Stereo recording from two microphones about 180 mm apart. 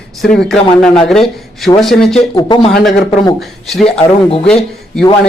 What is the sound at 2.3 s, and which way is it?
Speech, 25° left (ahead or behind).